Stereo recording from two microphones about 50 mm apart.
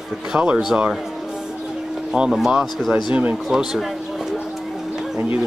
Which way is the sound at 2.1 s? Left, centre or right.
Centre.